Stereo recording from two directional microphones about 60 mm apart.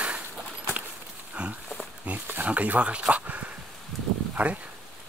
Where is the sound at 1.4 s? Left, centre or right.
Centre.